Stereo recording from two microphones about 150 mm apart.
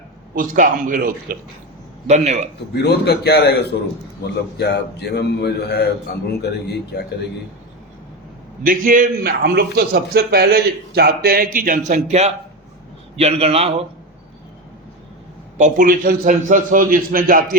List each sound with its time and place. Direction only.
0.3 s a man's voice: 60° right (ahead or behind)
2.0 s a man's voice: 50° right (ahead or behind)
2.8 s a man's voice: 90° left
8.6 s a man's voice: 65° right (ahead or behind); by 13.8 s 40° right (ahead or behind)
15.5 s a man's voice: 55° right (ahead or behind)